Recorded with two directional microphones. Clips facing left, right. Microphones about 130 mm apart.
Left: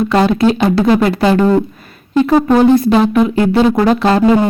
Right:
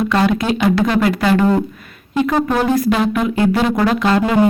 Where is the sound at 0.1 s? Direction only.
30° left (ahead or behind).